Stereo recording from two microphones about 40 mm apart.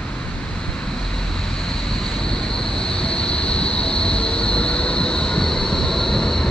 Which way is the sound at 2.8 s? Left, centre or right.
Centre.